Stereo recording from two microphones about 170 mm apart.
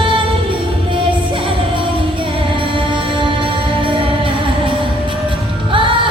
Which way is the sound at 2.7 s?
30° right (ahead or behind).